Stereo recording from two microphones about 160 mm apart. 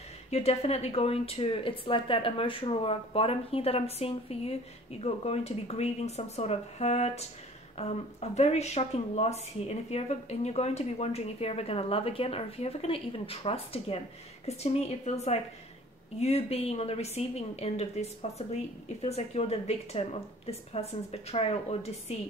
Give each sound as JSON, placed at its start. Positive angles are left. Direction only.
{"t": 0.3, "sound": "a woman's voice", "side_deg": 40}